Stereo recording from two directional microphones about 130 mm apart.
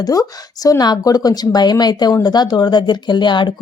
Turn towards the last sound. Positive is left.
turn(degrees=35)  # may be behind; listen again after turning